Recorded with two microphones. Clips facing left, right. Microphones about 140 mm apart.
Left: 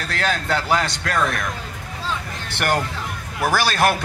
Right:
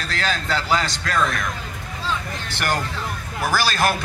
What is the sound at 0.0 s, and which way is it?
A man's voice, 60° left (ahead or behind).